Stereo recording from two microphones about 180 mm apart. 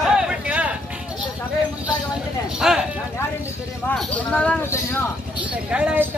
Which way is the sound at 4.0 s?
5° left (ahead or behind).